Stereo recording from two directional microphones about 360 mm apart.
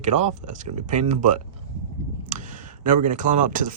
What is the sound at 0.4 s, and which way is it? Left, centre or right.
Speech, centre.